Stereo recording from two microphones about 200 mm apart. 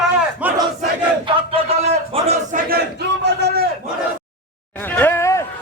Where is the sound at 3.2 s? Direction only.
55° right (ahead or behind).